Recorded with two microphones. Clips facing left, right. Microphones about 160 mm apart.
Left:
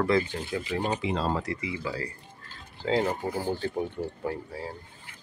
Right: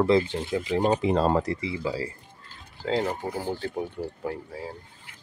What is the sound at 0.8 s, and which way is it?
Speech, 40° right (ahead or behind).